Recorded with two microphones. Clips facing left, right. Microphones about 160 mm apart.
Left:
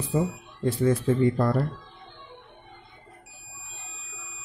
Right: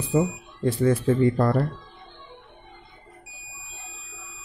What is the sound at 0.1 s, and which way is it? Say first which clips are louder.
Speech: right 4 dB; 65° right (ahead or behind).